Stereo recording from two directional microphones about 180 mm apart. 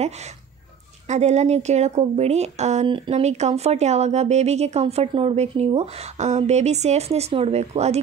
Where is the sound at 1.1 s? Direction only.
40° right (ahead or behind).